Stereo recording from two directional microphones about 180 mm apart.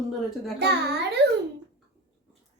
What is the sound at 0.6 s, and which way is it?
Speech, 65° right (ahead or behind).